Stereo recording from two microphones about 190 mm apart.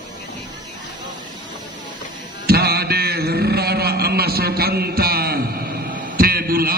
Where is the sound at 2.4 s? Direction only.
55° right (ahead or behind).